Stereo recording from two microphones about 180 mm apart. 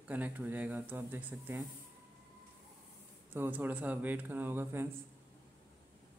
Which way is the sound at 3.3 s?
10° right (ahead or behind).